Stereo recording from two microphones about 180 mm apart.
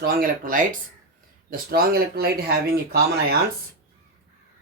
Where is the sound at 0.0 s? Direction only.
50° right (ahead or behind).